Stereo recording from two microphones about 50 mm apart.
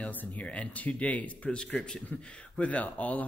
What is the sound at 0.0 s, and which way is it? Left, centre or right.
Speech, left.